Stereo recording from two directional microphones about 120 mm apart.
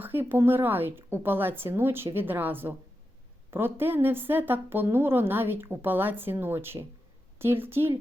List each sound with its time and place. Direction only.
0.0 s a woman's voice: 15° right (ahead or behind)